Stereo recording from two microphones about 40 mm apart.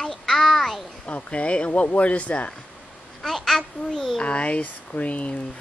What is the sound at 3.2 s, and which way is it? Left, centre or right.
Babbling, centre.